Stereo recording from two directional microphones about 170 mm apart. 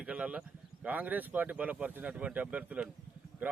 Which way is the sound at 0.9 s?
10° right (ahead or behind).